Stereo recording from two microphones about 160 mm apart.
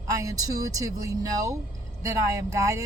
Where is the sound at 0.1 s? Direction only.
20° right (ahead or behind).